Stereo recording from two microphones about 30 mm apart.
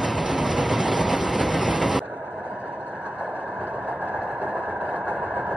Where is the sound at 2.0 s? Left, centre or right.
Right.